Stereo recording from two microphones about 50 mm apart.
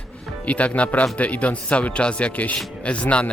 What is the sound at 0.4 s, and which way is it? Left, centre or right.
Speech, left.